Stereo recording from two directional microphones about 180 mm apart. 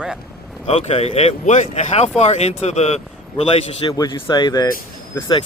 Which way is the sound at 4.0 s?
25° left (ahead or behind).